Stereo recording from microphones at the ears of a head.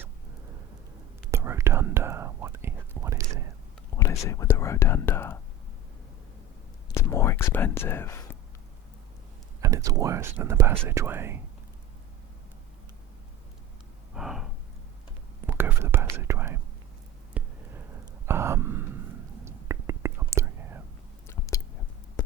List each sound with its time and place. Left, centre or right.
1.3 s whispering: right
3.9 s speech: left
6.9 s whispering: left
9.6 s speech: right
15.4 s speech: right
17.3 s sigh: right
21.2 s whispering: left